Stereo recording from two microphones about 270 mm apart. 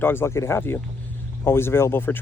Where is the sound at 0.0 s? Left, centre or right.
Centre.